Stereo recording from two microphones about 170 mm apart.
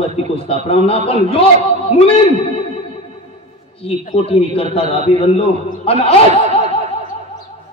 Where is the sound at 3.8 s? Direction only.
35° left (ahead or behind).